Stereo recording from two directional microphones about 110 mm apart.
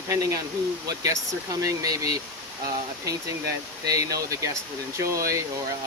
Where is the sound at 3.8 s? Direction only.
35° right (ahead or behind).